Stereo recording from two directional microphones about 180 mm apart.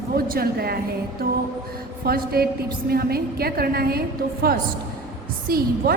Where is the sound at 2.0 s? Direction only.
55° right (ahead or behind).